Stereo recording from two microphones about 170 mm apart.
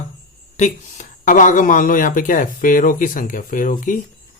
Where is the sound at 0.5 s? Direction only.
45° left (ahead or behind).